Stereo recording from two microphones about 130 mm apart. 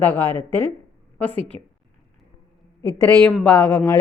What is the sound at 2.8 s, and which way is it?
Speech, 20° left (ahead or behind).